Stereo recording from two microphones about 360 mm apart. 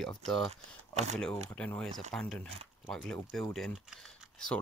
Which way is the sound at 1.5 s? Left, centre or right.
Centre.